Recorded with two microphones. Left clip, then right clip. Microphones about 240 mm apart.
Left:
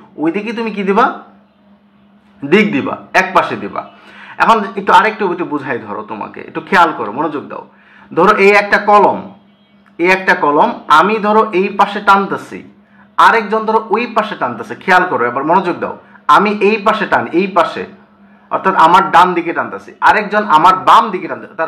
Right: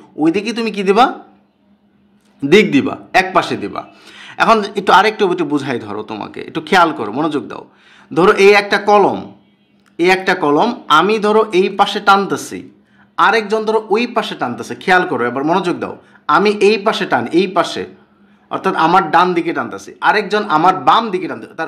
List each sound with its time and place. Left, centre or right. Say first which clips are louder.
0.2 s speech: right 1 dB; right
2.5 s speech: right 1 dB; right